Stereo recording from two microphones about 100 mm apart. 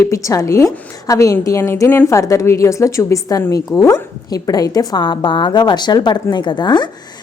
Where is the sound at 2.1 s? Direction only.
30° left (ahead or behind).